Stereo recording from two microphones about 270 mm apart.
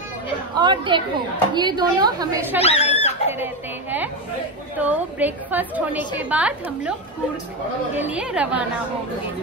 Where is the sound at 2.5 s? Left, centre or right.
Left.